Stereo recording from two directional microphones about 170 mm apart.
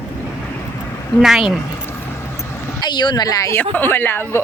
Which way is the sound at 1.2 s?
Centre (ahead or behind).